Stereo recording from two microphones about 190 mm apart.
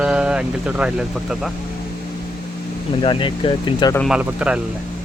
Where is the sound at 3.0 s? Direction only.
25° left (ahead or behind).